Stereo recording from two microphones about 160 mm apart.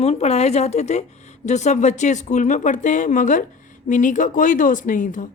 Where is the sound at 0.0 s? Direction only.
40° left (ahead or behind).